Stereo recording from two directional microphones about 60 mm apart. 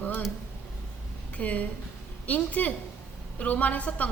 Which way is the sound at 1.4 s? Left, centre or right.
Left.